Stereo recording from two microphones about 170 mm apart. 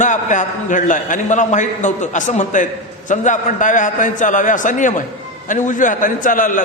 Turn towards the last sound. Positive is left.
turn(degrees=50)  # may be behind; listen again after turning